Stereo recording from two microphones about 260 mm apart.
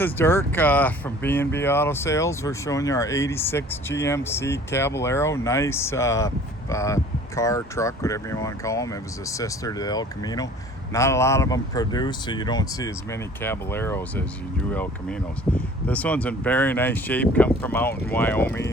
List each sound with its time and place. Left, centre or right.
0.0 s speech: centre
15.5 s speech: centre